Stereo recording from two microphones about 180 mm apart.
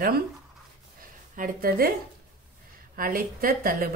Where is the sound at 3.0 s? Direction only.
50° right (ahead or behind).